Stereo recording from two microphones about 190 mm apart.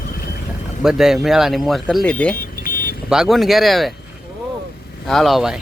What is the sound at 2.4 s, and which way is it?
Vehicle, 45° left (ahead or behind).